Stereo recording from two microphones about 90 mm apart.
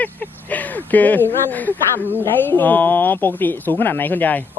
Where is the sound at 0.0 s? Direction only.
20° left (ahead or behind).